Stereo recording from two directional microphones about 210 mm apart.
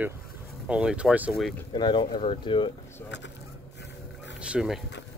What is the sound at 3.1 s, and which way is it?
Speech, 60° left (ahead or behind).